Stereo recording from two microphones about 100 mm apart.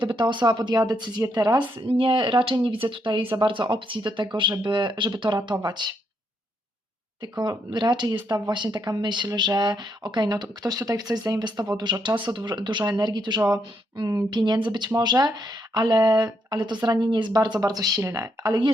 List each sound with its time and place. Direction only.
0.0 s speech: 50° right (ahead or behind)
1.9 s speech: 60° right (ahead or behind)
7.2 s speech: 45° right (ahead or behind)
13.9 s speech: 40° right (ahead or behind)
14.3 s speech: 50° right (ahead or behind)